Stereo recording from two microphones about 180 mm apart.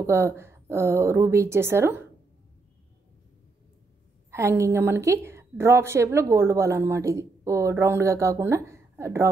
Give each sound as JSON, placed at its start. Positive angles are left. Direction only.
{"t": 0.0, "sound": "a woman's voice", "side_deg": -15}
{"t": 4.3, "sound": "a woman's voice", "side_deg": -15}